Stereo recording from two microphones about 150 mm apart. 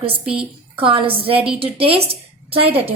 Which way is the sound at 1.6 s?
40° right (ahead or behind).